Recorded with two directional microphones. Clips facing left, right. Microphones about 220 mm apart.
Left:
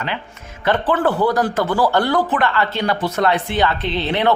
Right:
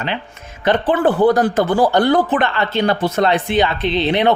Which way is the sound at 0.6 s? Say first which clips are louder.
Right 3 dB; 20° right (ahead or behind).